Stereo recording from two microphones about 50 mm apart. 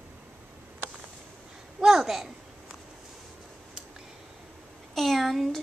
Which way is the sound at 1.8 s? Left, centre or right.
Centre.